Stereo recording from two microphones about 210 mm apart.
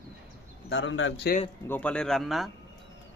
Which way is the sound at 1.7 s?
5° left (ahead or behind).